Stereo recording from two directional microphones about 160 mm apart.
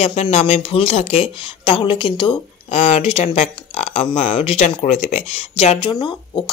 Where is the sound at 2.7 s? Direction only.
45° left (ahead or behind).